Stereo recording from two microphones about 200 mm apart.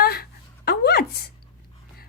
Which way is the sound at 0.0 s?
50° left (ahead or behind).